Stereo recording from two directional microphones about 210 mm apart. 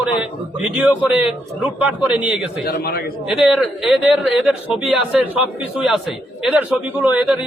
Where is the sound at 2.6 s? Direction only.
45° left (ahead or behind).